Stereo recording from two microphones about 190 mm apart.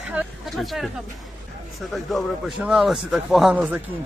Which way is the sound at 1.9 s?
Centre (ahead or behind).